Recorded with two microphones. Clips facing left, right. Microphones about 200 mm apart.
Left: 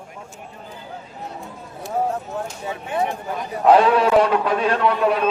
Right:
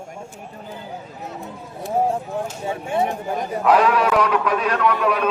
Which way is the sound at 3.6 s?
30° left (ahead or behind).